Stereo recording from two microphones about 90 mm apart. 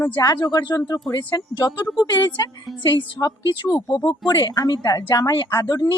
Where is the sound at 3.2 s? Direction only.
55° left (ahead or behind).